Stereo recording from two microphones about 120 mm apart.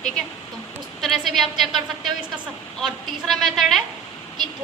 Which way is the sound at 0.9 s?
Centre (ahead or behind).